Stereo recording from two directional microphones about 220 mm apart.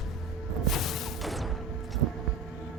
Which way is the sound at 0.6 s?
Centre (ahead or behind).